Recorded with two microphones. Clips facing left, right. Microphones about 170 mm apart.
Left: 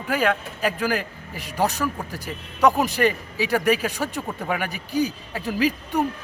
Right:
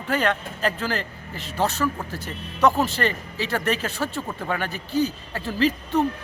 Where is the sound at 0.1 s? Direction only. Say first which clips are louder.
Left 1 dB; 10° left (ahead or behind).